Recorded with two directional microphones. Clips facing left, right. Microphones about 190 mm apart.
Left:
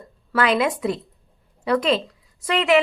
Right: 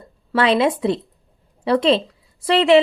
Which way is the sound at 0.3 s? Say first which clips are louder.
Right 3 dB; 30° right (ahead or behind).